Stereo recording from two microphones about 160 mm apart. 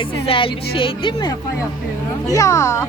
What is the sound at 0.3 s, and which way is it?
Speech, 35° left (ahead or behind).